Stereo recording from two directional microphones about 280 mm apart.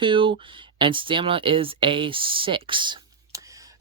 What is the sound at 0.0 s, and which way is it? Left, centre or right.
Speech, centre.